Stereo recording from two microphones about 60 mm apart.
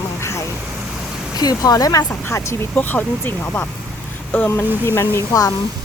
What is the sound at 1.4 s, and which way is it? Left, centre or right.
Speech, left.